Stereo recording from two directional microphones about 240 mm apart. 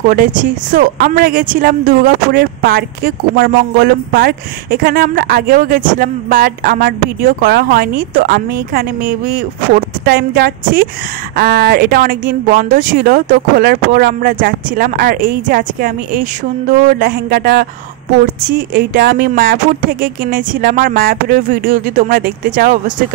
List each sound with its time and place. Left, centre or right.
0.1 s speech: right